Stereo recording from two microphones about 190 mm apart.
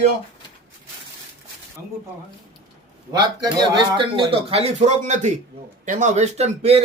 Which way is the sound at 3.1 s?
20° right (ahead or behind).